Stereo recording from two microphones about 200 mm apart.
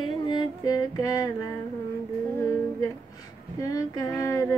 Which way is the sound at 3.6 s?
20° left (ahead or behind).